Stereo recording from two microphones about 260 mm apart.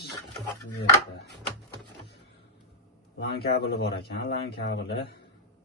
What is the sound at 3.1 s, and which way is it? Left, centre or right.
A man's voice, left.